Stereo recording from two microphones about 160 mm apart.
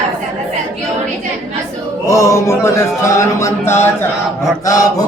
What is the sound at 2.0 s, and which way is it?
Speech, 20° left (ahead or behind).